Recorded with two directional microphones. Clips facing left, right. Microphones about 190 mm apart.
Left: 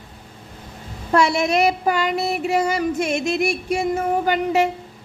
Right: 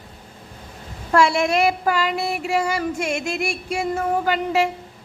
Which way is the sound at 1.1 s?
20° left (ahead or behind).